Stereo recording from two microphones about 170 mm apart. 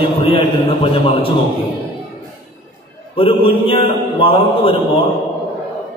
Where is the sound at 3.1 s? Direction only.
35° left (ahead or behind).